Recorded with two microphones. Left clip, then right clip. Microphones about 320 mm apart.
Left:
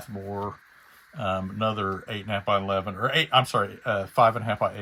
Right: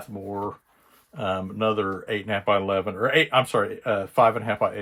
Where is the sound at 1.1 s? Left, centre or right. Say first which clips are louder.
Right 1 dB; centre.